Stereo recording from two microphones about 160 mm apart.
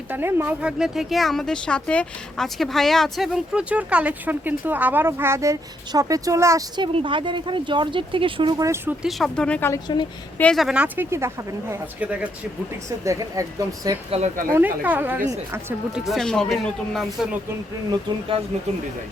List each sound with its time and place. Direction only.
0.1 s speech: 15° right (ahead or behind)
6.8 s speech: 30° right (ahead or behind)
9.0 s speech: centre (ahead or behind)
13.1 s speech: 20° right (ahead or behind)
16.0 s speech: centre (ahead or behind)